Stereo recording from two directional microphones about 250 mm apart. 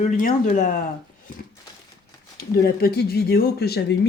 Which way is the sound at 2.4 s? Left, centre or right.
Left.